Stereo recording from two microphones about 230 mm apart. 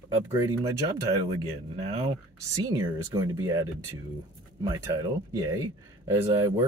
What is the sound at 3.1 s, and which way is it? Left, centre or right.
Speech, centre.